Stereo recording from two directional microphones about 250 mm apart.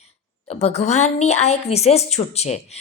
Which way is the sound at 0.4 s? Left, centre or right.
Left.